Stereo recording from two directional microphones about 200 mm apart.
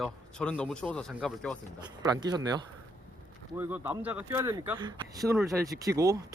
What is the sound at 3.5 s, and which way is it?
Speech, 10° right (ahead or behind).